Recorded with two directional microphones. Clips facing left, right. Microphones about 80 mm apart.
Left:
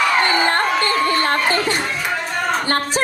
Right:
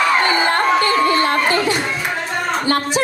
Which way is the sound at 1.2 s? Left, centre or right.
Left.